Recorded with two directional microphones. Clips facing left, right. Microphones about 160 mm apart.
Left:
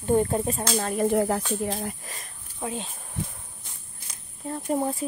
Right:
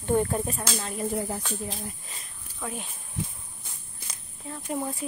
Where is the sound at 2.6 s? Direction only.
25° left (ahead or behind).